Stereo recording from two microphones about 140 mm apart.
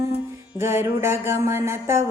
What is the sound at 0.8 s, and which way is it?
Speech, 15° right (ahead or behind).